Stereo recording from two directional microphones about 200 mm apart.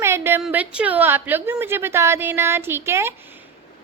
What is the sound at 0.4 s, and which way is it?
A woman's voice, 5° right (ahead or behind).